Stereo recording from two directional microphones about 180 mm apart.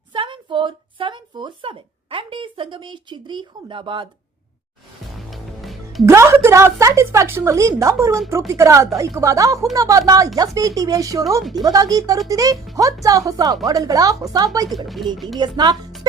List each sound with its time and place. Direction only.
0.1 s a sound: 25° right (ahead or behind)
5.3 s music: centre (ahead or behind)
6.1 s a woman's voice: 15° right (ahead or behind)
14.8 s speech: centre (ahead or behind)
15.4 s speech: 25° right (ahead or behind)